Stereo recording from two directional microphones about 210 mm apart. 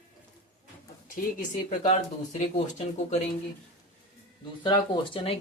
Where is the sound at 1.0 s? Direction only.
40° left (ahead or behind).